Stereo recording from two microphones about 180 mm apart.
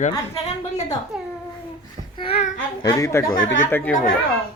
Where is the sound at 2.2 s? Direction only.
35° left (ahead or behind).